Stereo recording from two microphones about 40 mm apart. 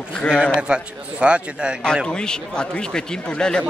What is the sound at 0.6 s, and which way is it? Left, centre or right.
A man's voice, right.